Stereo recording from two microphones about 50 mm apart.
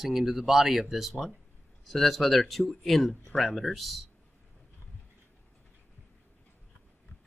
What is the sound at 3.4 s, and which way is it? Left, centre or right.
Speech, centre.